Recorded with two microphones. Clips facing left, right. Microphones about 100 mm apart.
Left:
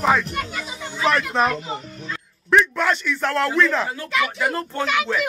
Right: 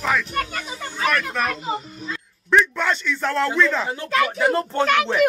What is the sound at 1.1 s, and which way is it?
Speech, 25° left (ahead or behind).